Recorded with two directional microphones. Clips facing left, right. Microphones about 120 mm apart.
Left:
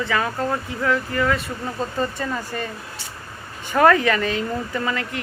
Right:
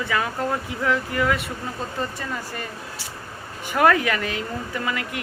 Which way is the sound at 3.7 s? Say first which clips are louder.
Left 3 dB; 5° right (ahead or behind).